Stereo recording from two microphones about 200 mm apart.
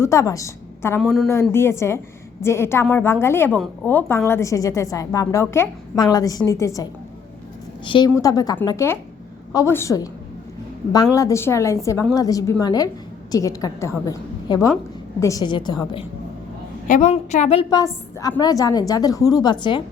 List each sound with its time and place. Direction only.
0.0 s a woman's voice: 15° left (ahead or behind)
7.9 s a woman's voice: 25° left (ahead or behind)
16.9 s a woman's voice: 40° left (ahead or behind); by 19.8 s 20° left (ahead or behind)